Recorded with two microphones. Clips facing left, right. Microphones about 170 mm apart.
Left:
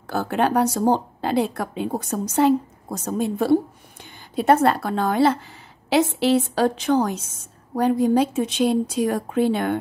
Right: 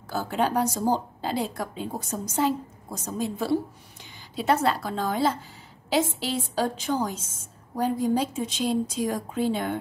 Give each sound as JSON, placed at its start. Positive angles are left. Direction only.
{"t": 0.0, "sound": "a woman's voice", "side_deg": 65}